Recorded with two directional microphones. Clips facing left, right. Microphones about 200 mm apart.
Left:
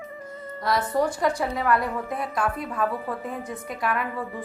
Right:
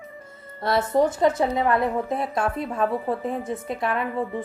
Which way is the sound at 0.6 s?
25° right (ahead or behind).